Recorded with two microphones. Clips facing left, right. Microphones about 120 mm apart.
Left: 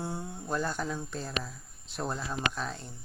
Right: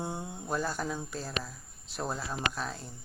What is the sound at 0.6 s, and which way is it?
Speech, centre (ahead or behind).